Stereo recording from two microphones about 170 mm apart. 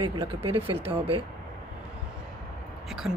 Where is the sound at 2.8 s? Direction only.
Centre (ahead or behind).